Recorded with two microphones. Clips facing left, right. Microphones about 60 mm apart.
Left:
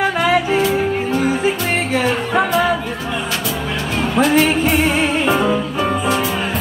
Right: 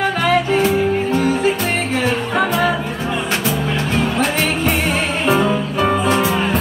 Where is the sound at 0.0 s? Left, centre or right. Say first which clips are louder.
Left 1 dB; centre.